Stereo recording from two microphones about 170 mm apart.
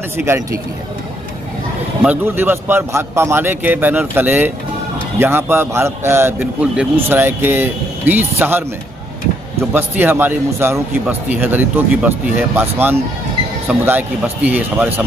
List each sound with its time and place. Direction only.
0.2 s a man's voice: 15° right (ahead or behind)
2.0 s a man's voice: 10° right (ahead or behind)